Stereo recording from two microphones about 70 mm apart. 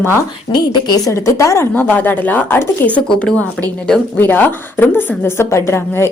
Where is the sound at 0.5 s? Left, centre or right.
Left.